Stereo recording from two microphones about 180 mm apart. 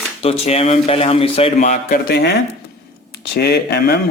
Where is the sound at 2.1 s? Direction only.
65° left (ahead or behind).